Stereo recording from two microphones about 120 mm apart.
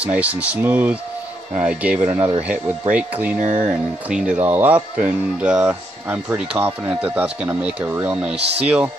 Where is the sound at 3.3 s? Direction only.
90° right.